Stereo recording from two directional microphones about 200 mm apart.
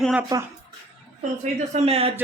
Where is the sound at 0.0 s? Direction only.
5° right (ahead or behind).